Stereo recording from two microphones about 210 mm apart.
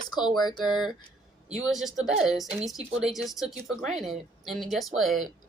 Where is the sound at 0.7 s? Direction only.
Centre (ahead or behind).